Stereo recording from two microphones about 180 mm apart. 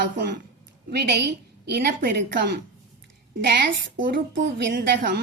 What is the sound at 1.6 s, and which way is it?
A woman's voice, 55° right (ahead or behind).